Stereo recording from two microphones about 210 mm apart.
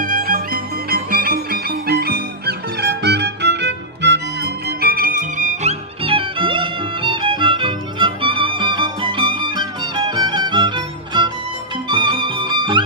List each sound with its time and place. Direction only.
0.0 s music: 40° right (ahead or behind)
6.0 s music: 25° right (ahead or behind)